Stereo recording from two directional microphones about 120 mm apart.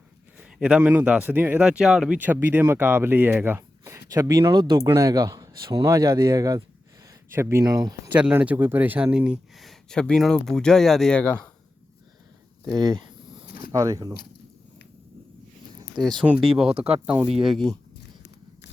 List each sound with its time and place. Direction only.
0.3 s a man's voice: 10° right (ahead or behind); by 8.1 s 30° right (ahead or behind)
8.1 s speech: 15° right (ahead or behind); by 11.3 s 10° left (ahead or behind)
13.7 s speech: 30° right (ahead or behind)
16.2 s a man's voice: 10° right (ahead or behind)
16.6 s speech: 55° right (ahead or behind)
17.1 s speech: 10° right (ahead or behind)